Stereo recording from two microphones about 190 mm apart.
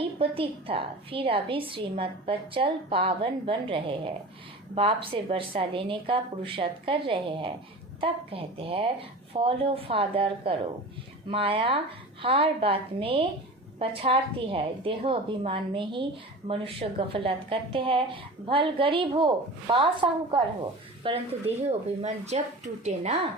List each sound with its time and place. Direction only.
0.0 s a woman's voice: 30° right (ahead or behind)